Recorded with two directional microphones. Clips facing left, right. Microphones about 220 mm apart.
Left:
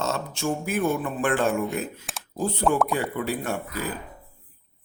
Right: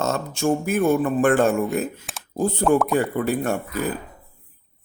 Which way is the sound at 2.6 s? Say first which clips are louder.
Right 4 dB; centre (ahead or behind).